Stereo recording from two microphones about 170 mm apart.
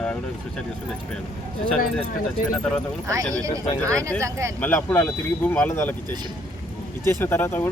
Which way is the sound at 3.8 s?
20° right (ahead or behind).